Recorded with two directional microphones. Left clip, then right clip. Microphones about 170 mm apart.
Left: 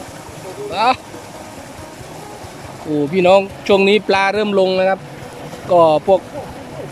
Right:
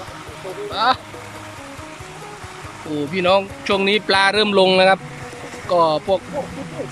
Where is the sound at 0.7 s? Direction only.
10° left (ahead or behind).